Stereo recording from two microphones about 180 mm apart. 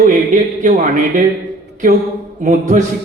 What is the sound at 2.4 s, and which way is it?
Speech, 45° right (ahead or behind).